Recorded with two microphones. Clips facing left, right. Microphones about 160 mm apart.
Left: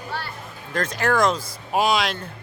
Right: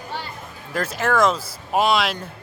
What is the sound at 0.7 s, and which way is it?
Speech, 5° right (ahead or behind).